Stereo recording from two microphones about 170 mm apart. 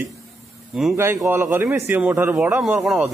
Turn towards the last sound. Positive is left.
turn(degrees=-5)  # may be behind; listen again after turning